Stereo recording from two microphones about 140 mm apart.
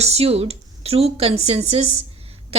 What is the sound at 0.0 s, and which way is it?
A woman's voice, 50° right (ahead or behind).